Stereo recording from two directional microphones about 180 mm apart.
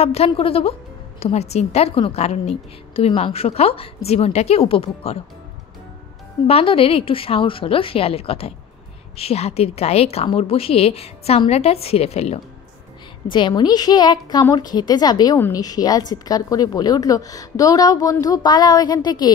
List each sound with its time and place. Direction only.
0.0 s a woman's voice: 35° left (ahead or behind)
6.4 s a woman's voice: 30° left (ahead or behind)
13.3 s a woman's voice: 25° left (ahead or behind)